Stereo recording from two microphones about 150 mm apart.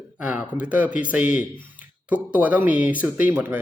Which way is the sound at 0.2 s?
10° right (ahead or behind).